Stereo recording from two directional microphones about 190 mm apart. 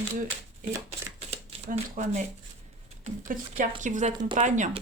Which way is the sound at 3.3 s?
45° right (ahead or behind).